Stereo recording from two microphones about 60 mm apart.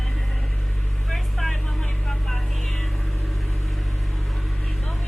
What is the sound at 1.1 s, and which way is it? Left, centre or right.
Vehicle, centre.